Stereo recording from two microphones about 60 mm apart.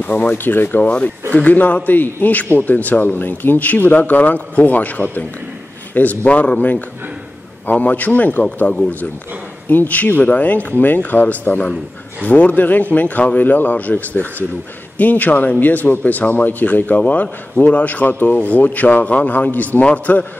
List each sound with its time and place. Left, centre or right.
0.0 s speech: left
0.8 s a man's voice: centre